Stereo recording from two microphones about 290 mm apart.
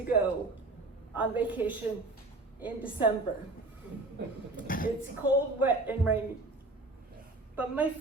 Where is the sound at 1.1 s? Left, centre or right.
Centre.